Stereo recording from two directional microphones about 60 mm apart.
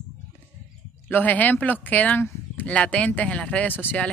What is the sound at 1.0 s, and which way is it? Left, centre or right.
Speech, left.